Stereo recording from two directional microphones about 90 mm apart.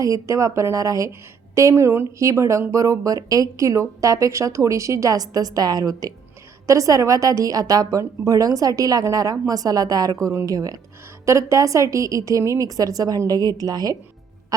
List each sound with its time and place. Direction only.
0.0 s speech: 35° right (ahead or behind)